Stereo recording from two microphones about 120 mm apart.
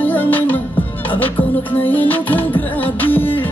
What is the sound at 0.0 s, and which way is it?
Music, 15° left (ahead or behind).